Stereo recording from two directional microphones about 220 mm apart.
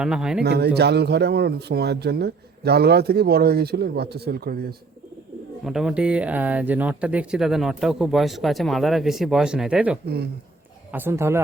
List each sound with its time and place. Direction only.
0.0 s speech: 5° right (ahead or behind)
0.4 s speech: 50° right (ahead or behind)
5.6 s speech: 5° right (ahead or behind)